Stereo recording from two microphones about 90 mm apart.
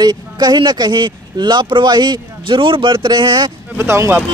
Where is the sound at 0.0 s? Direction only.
50° right (ahead or behind).